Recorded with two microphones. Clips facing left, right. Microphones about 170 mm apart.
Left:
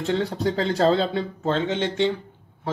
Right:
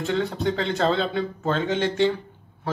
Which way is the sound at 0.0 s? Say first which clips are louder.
Left 1 dB; 35° left (ahead or behind).